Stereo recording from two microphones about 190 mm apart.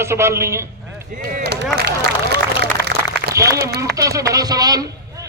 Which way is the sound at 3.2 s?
65° right (ahead or behind).